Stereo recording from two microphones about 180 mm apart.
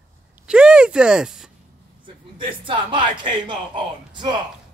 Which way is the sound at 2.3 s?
30° right (ahead or behind).